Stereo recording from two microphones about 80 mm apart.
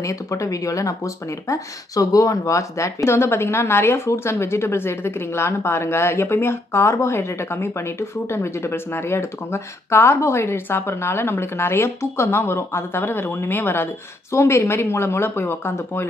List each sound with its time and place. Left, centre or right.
0.0 s speech: left